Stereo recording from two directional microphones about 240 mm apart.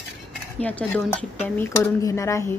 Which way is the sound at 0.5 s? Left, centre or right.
Centre.